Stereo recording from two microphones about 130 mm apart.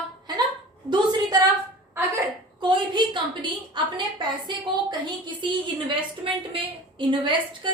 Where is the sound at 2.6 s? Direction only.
35° right (ahead or behind).